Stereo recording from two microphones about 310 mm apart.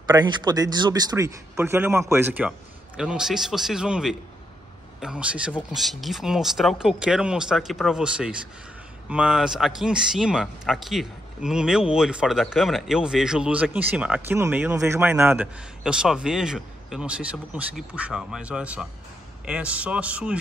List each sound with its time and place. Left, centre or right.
0.0 s speech: centre